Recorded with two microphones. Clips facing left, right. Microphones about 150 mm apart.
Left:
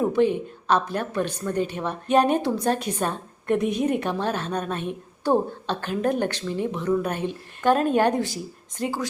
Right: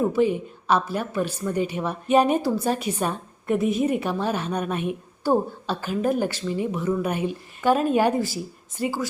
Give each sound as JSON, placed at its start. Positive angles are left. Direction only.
{"t": 0.0, "sound": "a woman's voice", "side_deg": -5}